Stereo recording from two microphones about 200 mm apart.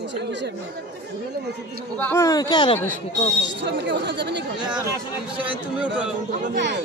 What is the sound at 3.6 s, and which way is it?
Speech, 60° right (ahead or behind).